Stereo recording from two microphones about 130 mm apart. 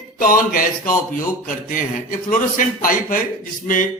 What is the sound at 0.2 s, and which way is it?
A man's voice, 90° left.